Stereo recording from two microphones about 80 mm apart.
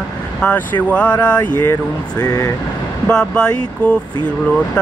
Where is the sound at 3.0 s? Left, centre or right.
Centre.